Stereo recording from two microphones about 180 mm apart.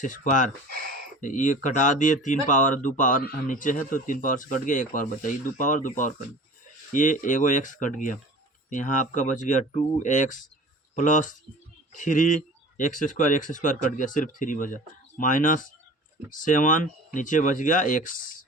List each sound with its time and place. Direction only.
0.0 s speech: 45° left (ahead or behind)